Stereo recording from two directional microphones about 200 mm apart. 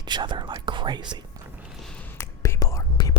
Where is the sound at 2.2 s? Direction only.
15° left (ahead or behind).